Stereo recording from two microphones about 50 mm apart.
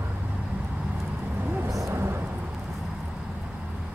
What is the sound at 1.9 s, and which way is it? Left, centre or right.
Thunder, right.